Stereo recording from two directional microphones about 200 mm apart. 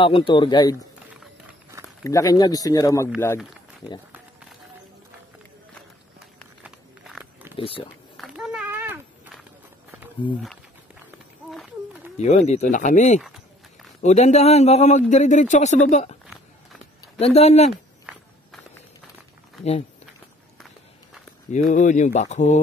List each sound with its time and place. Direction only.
0.0 s speech: 25° left (ahead or behind)
2.0 s speech: 15° left (ahead or behind)
6.6 s walk: 5° right (ahead or behind)
7.5 s speech: 30° left (ahead or behind)
8.2 s run: centre (ahead or behind)
10.2 s speech: 25° left (ahead or behind)
11.5 s run: centre (ahead or behind)
12.2 s a man's voice: 35° left (ahead or behind)
17.2 s a man's voice: 30° left (ahead or behind)
21.5 s a man's voice: 40° left (ahead or behind)